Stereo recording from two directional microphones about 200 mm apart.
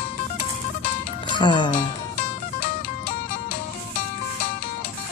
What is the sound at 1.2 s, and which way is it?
Speech, 25° left (ahead or behind).